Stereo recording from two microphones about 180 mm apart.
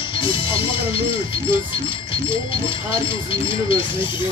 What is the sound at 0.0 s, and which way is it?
Speech, 30° left (ahead or behind).